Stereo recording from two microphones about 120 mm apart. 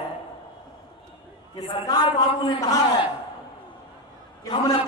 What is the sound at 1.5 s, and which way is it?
A man's voice, 45° left (ahead or behind).